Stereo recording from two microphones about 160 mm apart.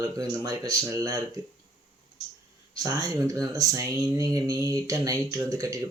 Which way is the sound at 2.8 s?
20° right (ahead or behind).